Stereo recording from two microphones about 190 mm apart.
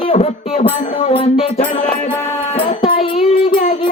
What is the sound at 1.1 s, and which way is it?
Music, 30° left (ahead or behind).